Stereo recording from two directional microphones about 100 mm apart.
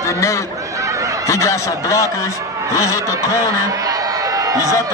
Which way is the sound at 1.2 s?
30° left (ahead or behind).